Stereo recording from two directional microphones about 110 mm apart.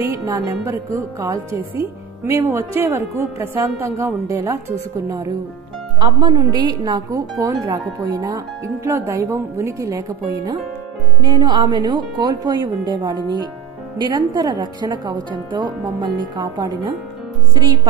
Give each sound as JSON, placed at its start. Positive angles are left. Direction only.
{"t": 0.0, "sound": "a woman's voice", "side_deg": -25}
{"t": 1.8, "sound": "a woman's voice", "side_deg": -20}
{"t": 5.9, "sound": "a woman's voice", "side_deg": -45}
{"t": 8.8, "sound": "a woman's voice", "side_deg": -25}
{"t": 11.1, "sound": "a woman's voice", "side_deg": -45}